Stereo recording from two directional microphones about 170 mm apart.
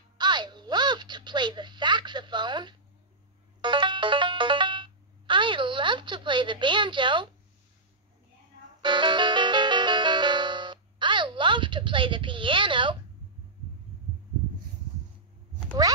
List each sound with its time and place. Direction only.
0.2 s a sound: 25° right (ahead or behind)
3.6 s music: 25° right (ahead or behind)
8.8 s music: 25° right (ahead or behind)